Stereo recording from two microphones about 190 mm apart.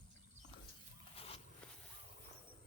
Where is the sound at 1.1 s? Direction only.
30° left (ahead or behind).